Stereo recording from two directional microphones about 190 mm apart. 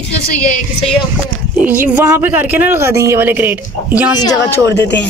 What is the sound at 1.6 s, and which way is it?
Speech, 10° right (ahead or behind).